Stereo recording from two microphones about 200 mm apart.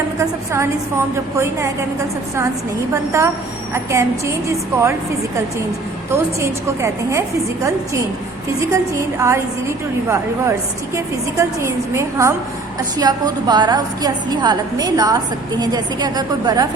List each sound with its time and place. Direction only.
0.2 s a woman's voice: 15° right (ahead or behind)
2.9 s a woman's voice: 15° right (ahead or behind)
6.1 s a woman's voice: 15° right (ahead or behind)